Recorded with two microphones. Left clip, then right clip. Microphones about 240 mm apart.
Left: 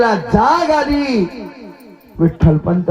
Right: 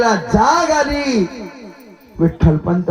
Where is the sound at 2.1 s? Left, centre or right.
Left.